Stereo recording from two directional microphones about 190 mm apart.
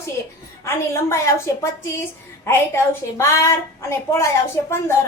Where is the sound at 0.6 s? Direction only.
15° left (ahead or behind).